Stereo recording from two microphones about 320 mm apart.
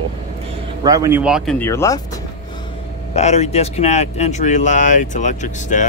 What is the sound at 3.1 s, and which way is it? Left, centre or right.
Speech, centre.